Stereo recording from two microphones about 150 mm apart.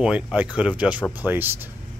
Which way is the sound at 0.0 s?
5° right (ahead or behind).